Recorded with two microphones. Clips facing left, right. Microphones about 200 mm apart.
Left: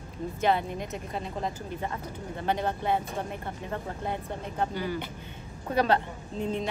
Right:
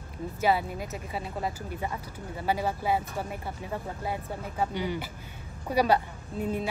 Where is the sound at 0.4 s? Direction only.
5° right (ahead or behind).